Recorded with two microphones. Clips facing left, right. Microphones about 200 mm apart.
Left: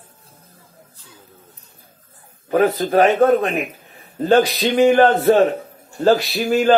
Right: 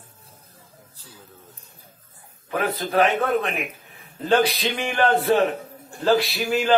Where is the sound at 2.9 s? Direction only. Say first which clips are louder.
Left 5 dB; 45° left (ahead or behind).